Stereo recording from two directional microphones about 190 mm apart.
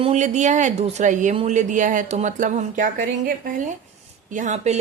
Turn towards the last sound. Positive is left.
turn(degrees=-40)  # may be behind; listen again after turning